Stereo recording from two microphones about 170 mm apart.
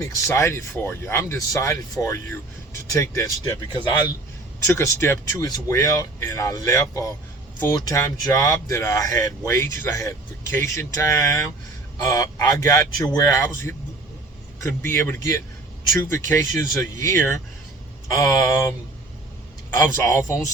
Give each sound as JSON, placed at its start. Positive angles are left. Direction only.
{"t": 0.0, "sound": "speech", "side_deg": 15}
{"t": 4.6, "sound": "speech", "side_deg": 15}
{"t": 19.7, "sound": "speech", "side_deg": 20}